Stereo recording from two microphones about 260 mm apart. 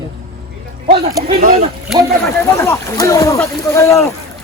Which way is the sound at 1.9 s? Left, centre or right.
Centre.